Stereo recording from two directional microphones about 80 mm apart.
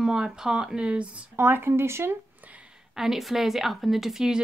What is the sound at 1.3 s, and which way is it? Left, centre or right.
Speech, right.